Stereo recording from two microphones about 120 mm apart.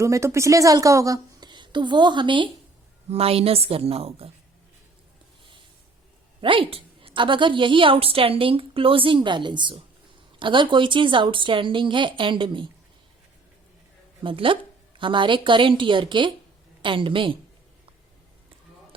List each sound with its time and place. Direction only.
0.0 s a woman's voice: 25° right (ahead or behind); by 2.5 s 45° right (ahead or behind)
3.1 s a woman's voice: 55° right (ahead or behind)
6.4 s a woman's voice: 45° right (ahead or behind)
14.3 s a woman's voice: 45° right (ahead or behind)